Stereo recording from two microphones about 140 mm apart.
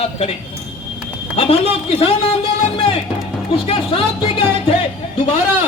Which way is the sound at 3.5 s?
40° left (ahead or behind).